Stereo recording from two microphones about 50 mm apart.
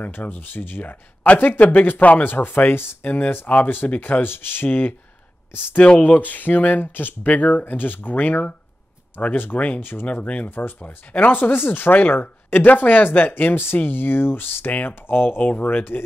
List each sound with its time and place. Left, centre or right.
0.0 s speech: left
3.0 s speech: left
5.8 s speech: left
10.2 s speech: left